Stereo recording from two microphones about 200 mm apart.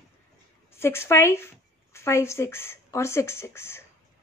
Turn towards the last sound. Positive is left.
turn(degrees=15)  # may be behind; listen again after turning